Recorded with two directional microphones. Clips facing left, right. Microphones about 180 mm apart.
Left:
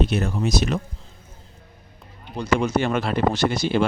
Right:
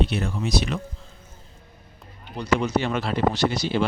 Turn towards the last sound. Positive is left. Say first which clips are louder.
# left 2 dB
turn(degrees=50)  # may be behind; listen again after turning